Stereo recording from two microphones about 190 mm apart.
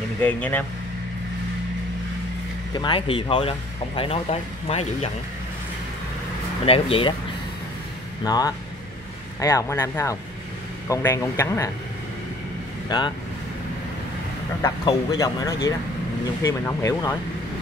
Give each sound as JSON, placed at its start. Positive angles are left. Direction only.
{"t": 0.2, "sound": "speech", "side_deg": 10}
{"t": 2.7, "sound": "speech", "side_deg": 25}
{"t": 6.6, "sound": "speech", "side_deg": 30}
{"t": 8.2, "sound": "speech", "side_deg": 20}
{"t": 12.8, "sound": "speech", "side_deg": 25}
{"t": 14.9, "sound": "speech", "side_deg": 20}